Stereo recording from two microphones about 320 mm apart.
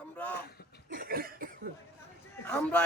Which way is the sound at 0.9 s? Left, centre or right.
Right.